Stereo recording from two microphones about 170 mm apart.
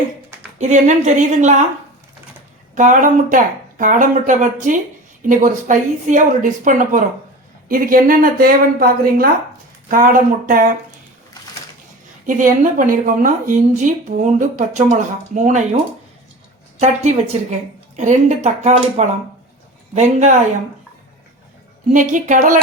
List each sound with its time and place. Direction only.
0.6 s a woman's voice: 45° right (ahead or behind)
2.7 s a woman's voice: 50° right (ahead or behind)
12.2 s a woman's voice: 50° right (ahead or behind)
16.8 s a woman's voice: 40° right (ahead or behind)
21.9 s a woman's voice: 45° right (ahead or behind)